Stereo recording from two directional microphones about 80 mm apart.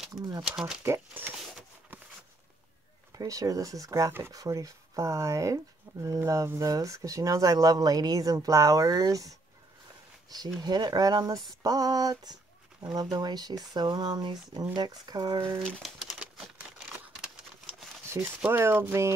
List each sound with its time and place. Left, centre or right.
0.1 s speech: right
0.4 s speech: centre
0.8 s a sound: right
3.2 s speech: right
10.3 s speech: right
15.8 s speech: centre
18.2 s speech: right